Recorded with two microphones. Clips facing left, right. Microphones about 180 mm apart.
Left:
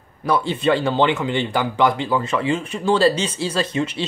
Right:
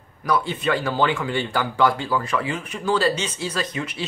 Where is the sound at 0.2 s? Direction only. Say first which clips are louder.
Left 3 dB; 30° left (ahead or behind).